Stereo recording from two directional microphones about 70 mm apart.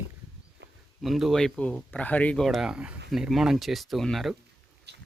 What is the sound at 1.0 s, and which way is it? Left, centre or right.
Speech, centre.